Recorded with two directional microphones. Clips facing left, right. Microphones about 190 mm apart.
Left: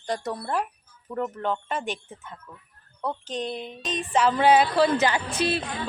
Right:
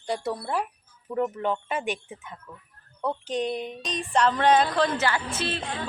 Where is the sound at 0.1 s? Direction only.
10° right (ahead or behind).